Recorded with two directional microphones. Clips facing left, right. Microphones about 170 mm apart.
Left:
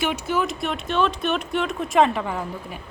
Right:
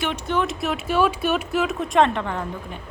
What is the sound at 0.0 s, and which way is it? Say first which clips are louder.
Speech: even; 5° left (ahead or behind).